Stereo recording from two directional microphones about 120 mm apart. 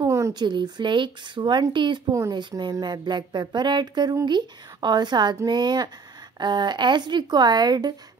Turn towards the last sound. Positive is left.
turn(degrees=-35)  # may be behind; listen again after turning